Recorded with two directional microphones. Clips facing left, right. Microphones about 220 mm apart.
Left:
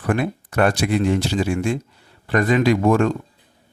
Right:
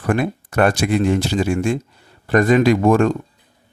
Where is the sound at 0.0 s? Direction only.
45° right (ahead or behind).